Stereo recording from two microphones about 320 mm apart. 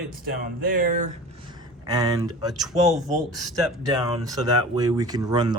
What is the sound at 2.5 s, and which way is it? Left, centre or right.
Speech, centre.